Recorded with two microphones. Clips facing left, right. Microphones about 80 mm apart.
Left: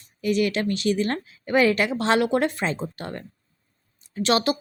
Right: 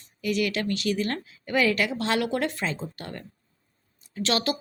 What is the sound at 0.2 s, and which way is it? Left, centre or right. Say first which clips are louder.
Speech: left 4 dB; left.